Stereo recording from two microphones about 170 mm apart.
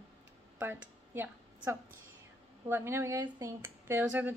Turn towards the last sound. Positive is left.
turn(degrees=-10)  # may be behind; listen again after turning